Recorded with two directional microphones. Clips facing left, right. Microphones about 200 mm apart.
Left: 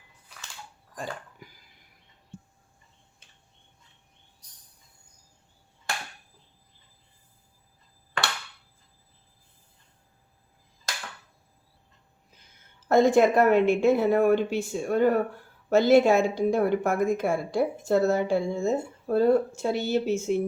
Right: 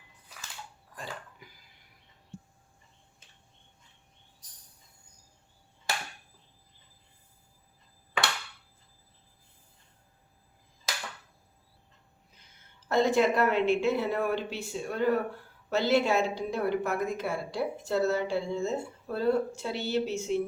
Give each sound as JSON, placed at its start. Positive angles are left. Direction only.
{"t": 12.9, "sound": "a woman's voice", "side_deg": 50}